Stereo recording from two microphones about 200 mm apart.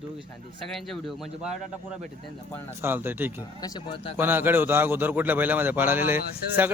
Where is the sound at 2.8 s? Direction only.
10° right (ahead or behind).